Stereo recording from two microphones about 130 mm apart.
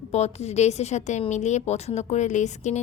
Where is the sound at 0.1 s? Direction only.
55° left (ahead or behind).